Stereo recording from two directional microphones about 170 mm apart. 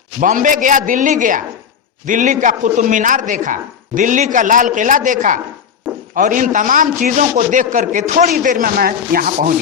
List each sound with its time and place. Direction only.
0.2 s a man's voice: 50° right (ahead or behind)